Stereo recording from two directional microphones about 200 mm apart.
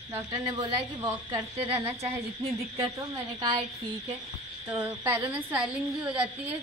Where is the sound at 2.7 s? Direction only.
20° right (ahead or behind).